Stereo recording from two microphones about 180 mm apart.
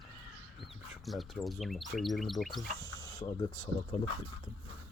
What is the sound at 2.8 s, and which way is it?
Speech, 20° left (ahead or behind).